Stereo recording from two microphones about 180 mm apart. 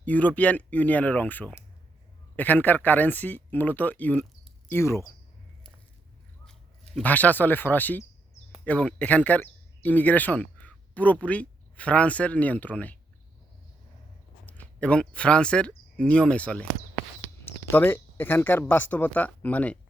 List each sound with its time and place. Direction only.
0.0 s speech: 10° left (ahead or behind)
6.4 s speech: 5° left (ahead or behind)
14.6 s speech: 5° left (ahead or behind)